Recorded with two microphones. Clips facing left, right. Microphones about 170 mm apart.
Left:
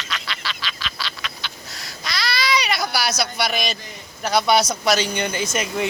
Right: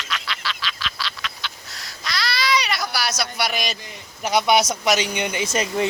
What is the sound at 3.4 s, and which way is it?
Speech, 10° right (ahead or behind).